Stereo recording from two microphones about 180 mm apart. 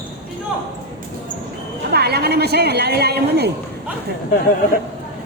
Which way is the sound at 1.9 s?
65° right (ahead or behind).